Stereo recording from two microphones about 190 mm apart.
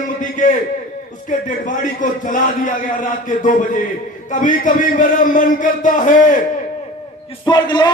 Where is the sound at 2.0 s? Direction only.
45° left (ahead or behind).